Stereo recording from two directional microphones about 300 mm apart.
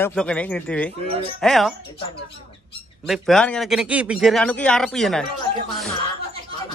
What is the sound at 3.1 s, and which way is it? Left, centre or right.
Speech, centre.